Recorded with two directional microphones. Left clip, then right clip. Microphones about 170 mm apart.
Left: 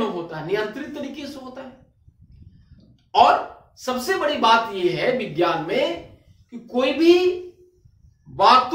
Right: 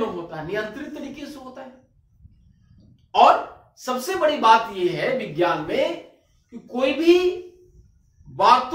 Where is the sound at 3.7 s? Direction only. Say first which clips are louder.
Left 2 dB; 30° left (ahead or behind).